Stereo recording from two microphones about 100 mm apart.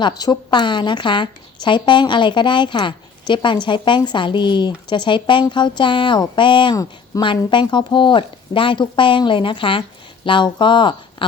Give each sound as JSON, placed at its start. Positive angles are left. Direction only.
{"t": 0.0, "sound": "a woman's voice", "side_deg": 45}